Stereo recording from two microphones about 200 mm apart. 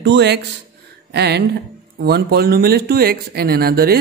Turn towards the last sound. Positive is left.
turn(degrees=-50)  # may be behind; listen again after turning